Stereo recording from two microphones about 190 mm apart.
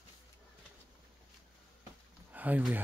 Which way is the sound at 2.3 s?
10° right (ahead or behind).